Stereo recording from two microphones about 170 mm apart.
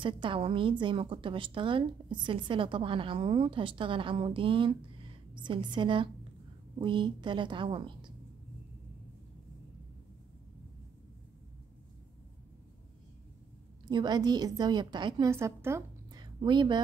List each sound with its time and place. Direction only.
0.0 s a woman's voice: 30° right (ahead or behind)
13.8 s a woman's voice: 25° right (ahead or behind)